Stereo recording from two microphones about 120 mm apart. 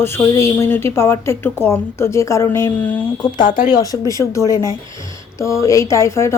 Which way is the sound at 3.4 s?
90° left.